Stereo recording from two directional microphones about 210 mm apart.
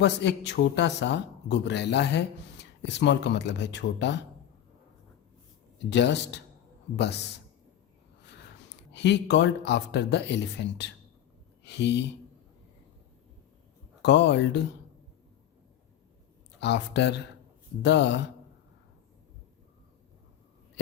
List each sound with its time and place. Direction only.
0.0 s speech: 55° left (ahead or behind)
5.8 s a man's voice: 55° left (ahead or behind)
14.0 s speech: 55° left (ahead or behind)
16.6 s speech: 55° left (ahead or behind)